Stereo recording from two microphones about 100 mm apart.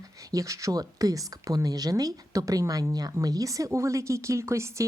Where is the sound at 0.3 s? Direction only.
35° right (ahead or behind).